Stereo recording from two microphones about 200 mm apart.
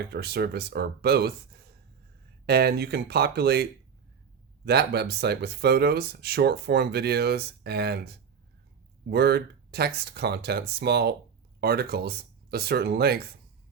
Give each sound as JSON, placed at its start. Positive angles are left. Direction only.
{"t": 0.1, "sound": "speech", "side_deg": -55}
{"t": 2.5, "sound": "speech", "side_deg": -55}